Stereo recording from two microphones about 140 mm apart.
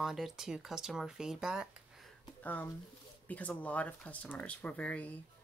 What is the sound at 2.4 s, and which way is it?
Speech, 10° left (ahead or behind).